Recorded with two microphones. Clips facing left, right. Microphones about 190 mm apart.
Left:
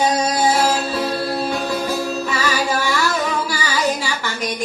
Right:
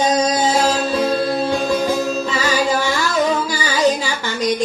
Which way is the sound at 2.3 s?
20° right (ahead or behind).